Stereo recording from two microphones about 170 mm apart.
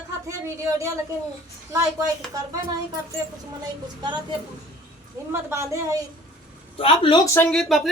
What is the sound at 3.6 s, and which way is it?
Speech, 25° right (ahead or behind).